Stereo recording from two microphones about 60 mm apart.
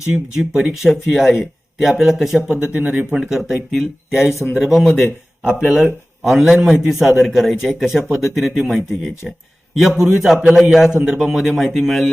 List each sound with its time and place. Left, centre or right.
0.3 s speech: centre
2.6 s speech: right
3.2 s speech: centre
5.4 s a man's voice: centre